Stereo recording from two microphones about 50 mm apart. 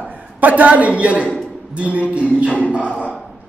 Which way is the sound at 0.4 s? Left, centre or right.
Right.